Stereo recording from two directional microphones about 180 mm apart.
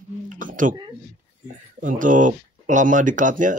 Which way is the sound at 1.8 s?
45° right (ahead or behind).